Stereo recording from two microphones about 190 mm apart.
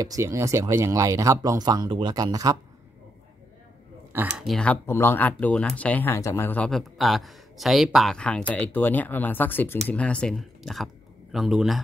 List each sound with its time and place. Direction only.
0.0 s speech: 15° right (ahead or behind)
4.1 s speech: 10° right (ahead or behind)
4.5 s speech: 5° left (ahead or behind)